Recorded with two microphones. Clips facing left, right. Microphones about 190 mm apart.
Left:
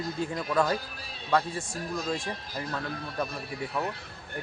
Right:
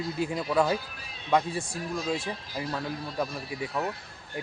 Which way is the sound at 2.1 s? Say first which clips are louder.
Right 1 dB; 15° right (ahead or behind).